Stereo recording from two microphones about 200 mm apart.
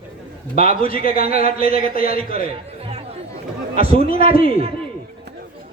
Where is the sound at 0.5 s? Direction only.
45° left (ahead or behind).